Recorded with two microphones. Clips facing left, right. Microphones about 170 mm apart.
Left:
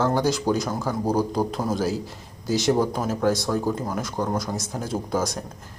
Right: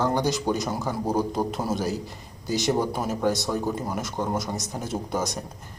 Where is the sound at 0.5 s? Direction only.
Centre (ahead or behind).